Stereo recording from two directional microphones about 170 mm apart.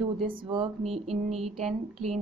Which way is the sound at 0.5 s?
30° right (ahead or behind).